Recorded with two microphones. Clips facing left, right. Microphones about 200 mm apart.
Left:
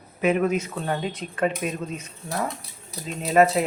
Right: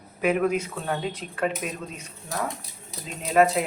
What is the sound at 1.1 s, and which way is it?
Speech, 5° right (ahead or behind).